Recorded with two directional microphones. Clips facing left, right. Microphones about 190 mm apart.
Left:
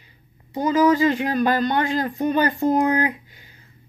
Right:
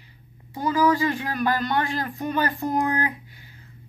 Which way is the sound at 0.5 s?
20° left (ahead or behind).